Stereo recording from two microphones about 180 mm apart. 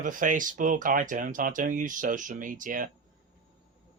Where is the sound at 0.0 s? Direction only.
45° right (ahead or behind).